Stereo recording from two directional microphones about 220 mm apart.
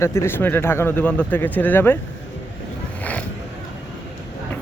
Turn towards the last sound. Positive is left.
turn(degrees=5)  # may be behind; listen again after turning